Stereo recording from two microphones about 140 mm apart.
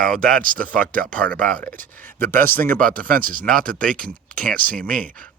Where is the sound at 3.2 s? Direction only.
80° right.